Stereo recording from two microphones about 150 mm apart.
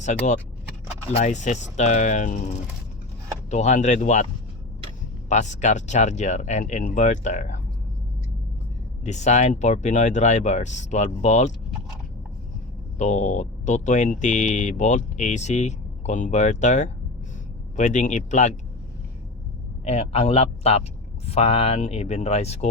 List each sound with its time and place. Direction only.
1.1 s speech: 50° left (ahead or behind)
3.5 s speech: 50° left (ahead or behind)
5.3 s speech: 50° left (ahead or behind)
9.0 s speech: 50° left (ahead or behind)
13.0 s speech: 50° left (ahead or behind)
19.8 s speech: 45° left (ahead or behind)